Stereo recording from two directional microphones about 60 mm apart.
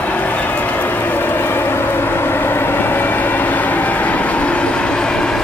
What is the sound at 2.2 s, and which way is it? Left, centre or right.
Vehicle, left.